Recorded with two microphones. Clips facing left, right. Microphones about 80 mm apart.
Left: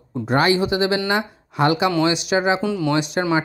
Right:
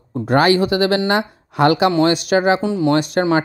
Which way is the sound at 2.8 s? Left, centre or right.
Right.